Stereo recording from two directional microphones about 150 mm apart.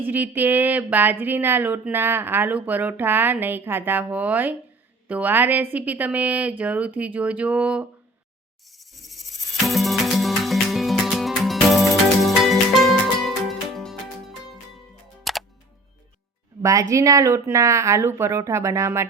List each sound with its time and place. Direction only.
0.0 s speech: 10° right (ahead or behind)
9.6 s music: centre (ahead or behind)
16.9 s speech: 20° right (ahead or behind)